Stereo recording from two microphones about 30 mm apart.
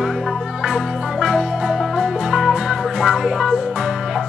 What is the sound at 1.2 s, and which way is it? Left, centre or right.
Music, centre.